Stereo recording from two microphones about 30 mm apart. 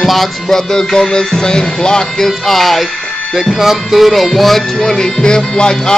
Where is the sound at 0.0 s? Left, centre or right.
Centre.